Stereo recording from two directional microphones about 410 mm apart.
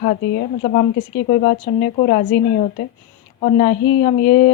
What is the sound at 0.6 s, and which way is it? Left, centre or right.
A woman's voice, centre.